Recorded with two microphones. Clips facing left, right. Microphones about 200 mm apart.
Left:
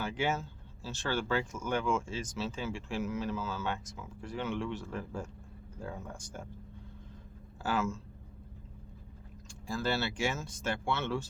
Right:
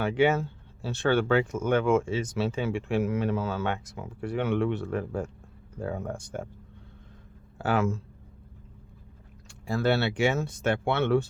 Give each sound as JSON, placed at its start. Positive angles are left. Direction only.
{"t": 0.0, "sound": "speech", "side_deg": -65}
{"t": 7.6, "sound": "speech", "side_deg": -60}
{"t": 9.5, "sound": "speech", "side_deg": -65}